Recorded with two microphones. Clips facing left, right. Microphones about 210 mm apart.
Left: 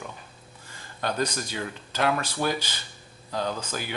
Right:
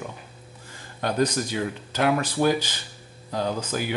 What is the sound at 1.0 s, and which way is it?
Speech, 15° right (ahead or behind).